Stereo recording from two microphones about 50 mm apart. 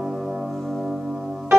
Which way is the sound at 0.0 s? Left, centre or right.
Centre.